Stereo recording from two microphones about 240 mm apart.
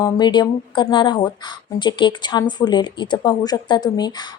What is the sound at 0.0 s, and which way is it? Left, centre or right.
Speech, centre.